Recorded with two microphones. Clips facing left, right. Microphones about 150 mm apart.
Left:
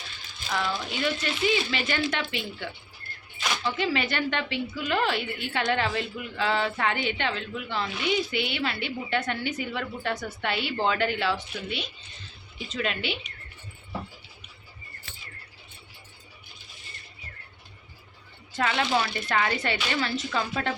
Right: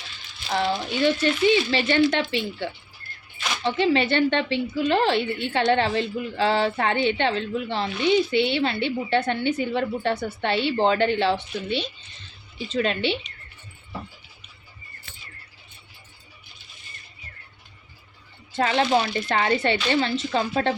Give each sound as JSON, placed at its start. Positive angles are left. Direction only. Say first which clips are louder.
{"t": 0.5, "sound": "a woman's voice", "louder": "right 5 dB", "side_deg": -35}
{"t": 18.5, "sound": "a woman's voice", "louder": "right 5 dB", "side_deg": -30}